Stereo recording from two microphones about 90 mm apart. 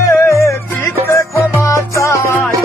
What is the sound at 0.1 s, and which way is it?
Music, 30° left (ahead or behind).